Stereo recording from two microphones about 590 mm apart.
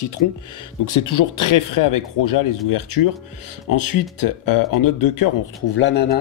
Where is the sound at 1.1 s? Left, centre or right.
Left.